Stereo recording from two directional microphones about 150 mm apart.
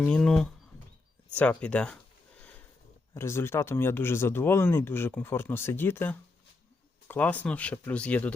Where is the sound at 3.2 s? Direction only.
15° left (ahead or behind).